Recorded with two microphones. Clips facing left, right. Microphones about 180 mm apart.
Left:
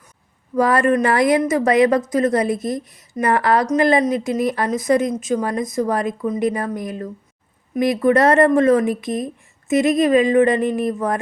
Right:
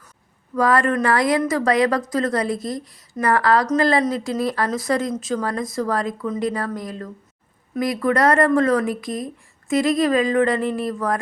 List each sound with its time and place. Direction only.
0.5 s speech: 25° left (ahead or behind)